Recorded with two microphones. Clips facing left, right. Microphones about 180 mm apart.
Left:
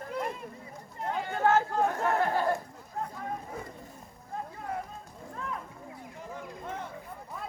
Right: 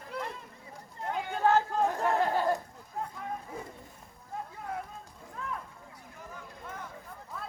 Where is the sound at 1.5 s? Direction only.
15° right (ahead or behind).